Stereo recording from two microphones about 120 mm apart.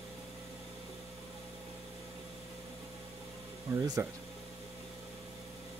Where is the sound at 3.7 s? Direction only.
25° right (ahead or behind).